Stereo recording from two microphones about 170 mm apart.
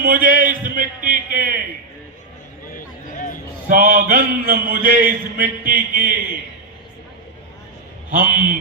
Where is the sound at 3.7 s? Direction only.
55° right (ahead or behind).